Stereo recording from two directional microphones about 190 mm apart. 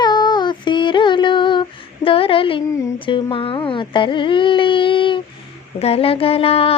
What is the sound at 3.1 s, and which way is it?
Speech, 25° left (ahead or behind).